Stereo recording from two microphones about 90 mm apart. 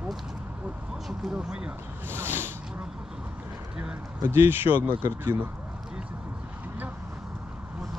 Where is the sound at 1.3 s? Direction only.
10° right (ahead or behind).